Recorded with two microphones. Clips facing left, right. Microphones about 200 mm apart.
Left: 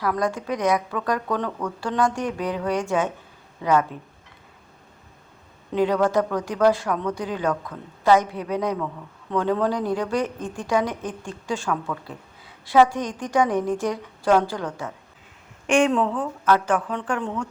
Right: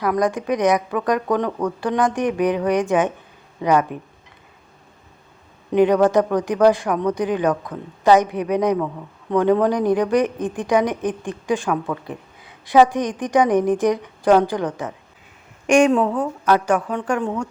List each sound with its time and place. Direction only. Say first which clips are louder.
0.0 s a woman's voice: right 4 dB; 15° right (ahead or behind)
1.5 s speech: right 6 dB; 35° right (ahead or behind)
1.8 s a woman's voice: right 3 dB; 15° right (ahead or behind)
5.7 s a woman's voice: right 5 dB; 20° right (ahead or behind)
16.0 s speech: right 4 dB; 45° right (ahead or behind)
16.5 s a woman's voice: right 2 dB; 10° right (ahead or behind)